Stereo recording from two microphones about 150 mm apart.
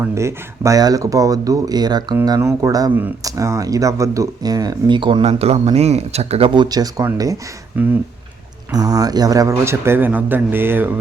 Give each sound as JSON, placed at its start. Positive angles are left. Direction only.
{"t": 0.0, "sound": "speech", "side_deg": -20}
{"t": 7.8, "sound": "a man's voice", "side_deg": -10}
{"t": 8.7, "sound": "a man's voice", "side_deg": -25}